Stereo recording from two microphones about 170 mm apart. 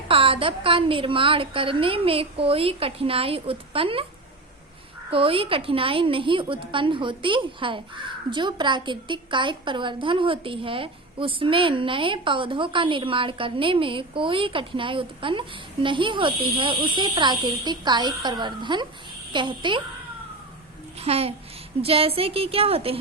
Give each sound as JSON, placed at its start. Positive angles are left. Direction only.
{"t": 0.1, "sound": "a woman's voice", "side_deg": -30}
{"t": 5.1, "sound": "a woman's voice", "side_deg": -35}
{"t": 21.0, "sound": "a woman's voice", "side_deg": -35}